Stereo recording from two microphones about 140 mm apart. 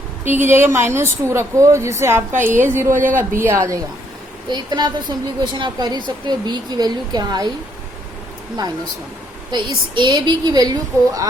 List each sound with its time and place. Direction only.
0.3 s a woman's voice: 15° right (ahead or behind)
9.5 s a woman's voice: 35° right (ahead or behind)